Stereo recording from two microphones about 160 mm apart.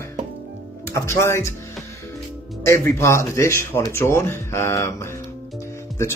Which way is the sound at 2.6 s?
15° left (ahead or behind).